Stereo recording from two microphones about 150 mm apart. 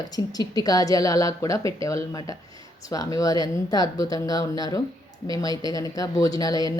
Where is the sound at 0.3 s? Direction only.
25° left (ahead or behind).